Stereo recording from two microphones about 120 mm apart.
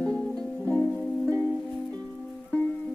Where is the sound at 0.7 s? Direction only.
20° left (ahead or behind).